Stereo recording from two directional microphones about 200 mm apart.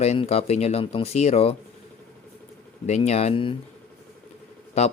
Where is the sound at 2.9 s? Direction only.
35° left (ahead or behind).